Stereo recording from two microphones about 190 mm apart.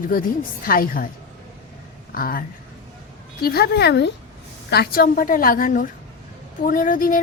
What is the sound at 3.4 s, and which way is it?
A woman's voice, 55° left (ahead or behind).